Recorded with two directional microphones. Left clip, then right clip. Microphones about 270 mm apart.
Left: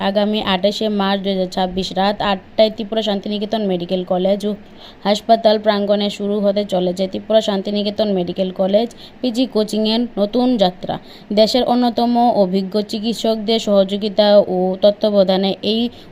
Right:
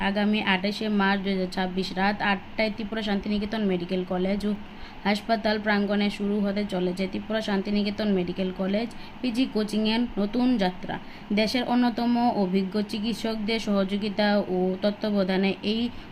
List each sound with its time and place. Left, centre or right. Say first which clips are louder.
0.0 s speech: left 9 dB; left